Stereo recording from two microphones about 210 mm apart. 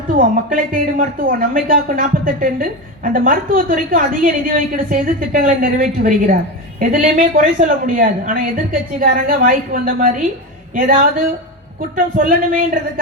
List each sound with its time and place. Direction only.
0.1 s a woman's voice: 40° right (ahead or behind)